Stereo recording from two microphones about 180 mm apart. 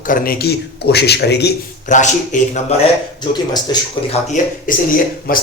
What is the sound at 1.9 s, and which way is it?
Speech, 45° left (ahead or behind).